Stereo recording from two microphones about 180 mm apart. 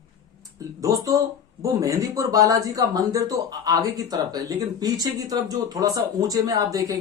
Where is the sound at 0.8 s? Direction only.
20° right (ahead or behind).